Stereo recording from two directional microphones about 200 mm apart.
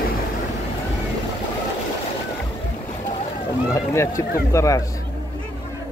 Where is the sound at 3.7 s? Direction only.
15° left (ahead or behind).